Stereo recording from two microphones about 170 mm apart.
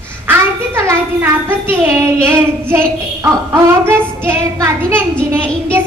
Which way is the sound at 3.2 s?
15° right (ahead or behind).